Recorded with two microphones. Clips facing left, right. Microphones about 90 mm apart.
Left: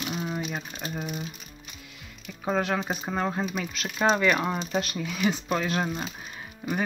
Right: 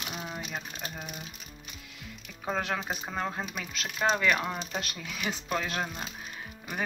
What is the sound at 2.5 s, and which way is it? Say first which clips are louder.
Speech: left 5 dB; 5° left (ahead or behind).